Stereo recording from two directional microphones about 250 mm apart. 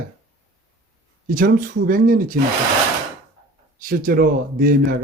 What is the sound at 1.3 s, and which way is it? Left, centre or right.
A man's voice, right.